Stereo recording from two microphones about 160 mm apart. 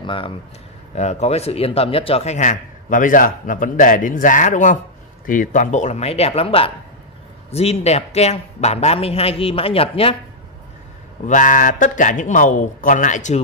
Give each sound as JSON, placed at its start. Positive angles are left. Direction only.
{"t": 0.0, "sound": "speech", "side_deg": 35}
{"t": 0.9, "sound": "a man's voice", "side_deg": 45}
{"t": 11.2, "sound": "speech", "side_deg": 55}